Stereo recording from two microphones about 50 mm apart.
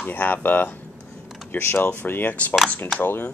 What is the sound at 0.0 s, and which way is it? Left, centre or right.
Speech, left.